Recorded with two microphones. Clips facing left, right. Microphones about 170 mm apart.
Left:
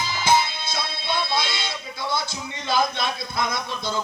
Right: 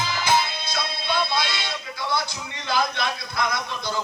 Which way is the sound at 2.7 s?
20° left (ahead or behind).